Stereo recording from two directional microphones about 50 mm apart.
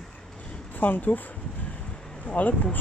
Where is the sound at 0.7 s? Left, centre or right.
Left.